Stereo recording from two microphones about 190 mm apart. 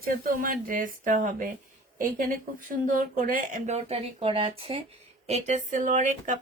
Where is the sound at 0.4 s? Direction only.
45° right (ahead or behind).